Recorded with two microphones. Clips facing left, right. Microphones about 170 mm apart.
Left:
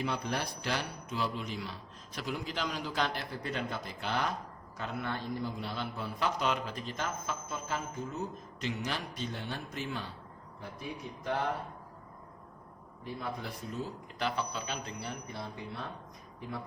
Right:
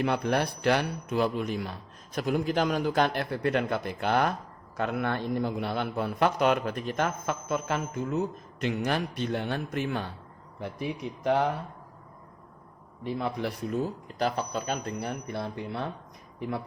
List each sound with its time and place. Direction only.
0.0 s a man's voice: 60° right (ahead or behind)
8.6 s a man's voice: 55° right (ahead or behind)
10.6 s a man's voice: 70° right (ahead or behind)
13.1 s a man's voice: 75° right (ahead or behind)
13.8 s speech: 40° right (ahead or behind); by 15.9 s 65° right (ahead or behind)